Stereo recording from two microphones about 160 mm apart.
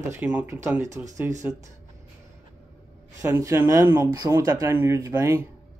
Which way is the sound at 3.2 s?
15° right (ahead or behind).